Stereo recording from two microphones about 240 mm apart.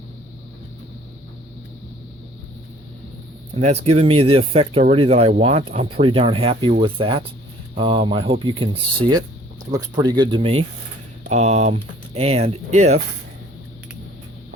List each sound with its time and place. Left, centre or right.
3.5 s speech: right